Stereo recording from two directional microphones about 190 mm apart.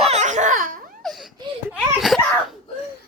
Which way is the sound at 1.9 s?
Centre (ahead or behind).